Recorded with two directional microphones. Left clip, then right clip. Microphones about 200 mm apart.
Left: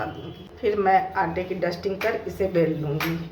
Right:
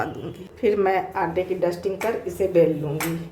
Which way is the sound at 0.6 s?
30° right (ahead or behind).